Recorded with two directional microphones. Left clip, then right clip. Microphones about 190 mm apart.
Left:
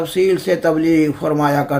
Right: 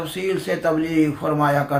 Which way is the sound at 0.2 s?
50° left (ahead or behind).